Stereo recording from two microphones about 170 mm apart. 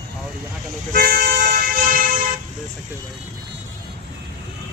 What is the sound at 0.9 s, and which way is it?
Toot, 60° right (ahead or behind).